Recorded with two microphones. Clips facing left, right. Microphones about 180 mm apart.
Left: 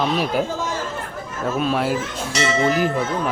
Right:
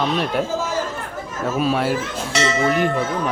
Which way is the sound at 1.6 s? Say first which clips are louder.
Right 1 dB; centre (ahead or behind).